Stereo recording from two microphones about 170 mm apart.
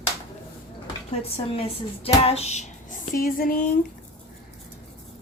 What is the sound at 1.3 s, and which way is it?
Speech, 35° left (ahead or behind).